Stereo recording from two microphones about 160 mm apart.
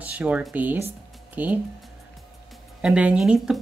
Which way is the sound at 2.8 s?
5° right (ahead or behind).